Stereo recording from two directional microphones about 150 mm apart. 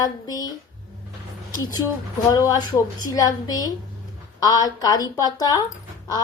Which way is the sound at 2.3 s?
20° left (ahead or behind).